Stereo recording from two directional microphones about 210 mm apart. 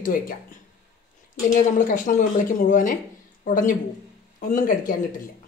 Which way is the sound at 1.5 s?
40° left (ahead or behind).